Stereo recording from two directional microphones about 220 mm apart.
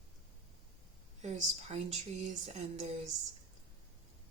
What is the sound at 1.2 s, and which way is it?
Speech, 30° right (ahead or behind).